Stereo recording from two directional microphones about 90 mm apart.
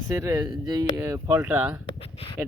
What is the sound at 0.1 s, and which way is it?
Speech, 30° right (ahead or behind).